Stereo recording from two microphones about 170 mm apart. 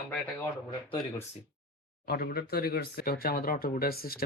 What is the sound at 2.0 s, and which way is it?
Speech, 65° left (ahead or behind).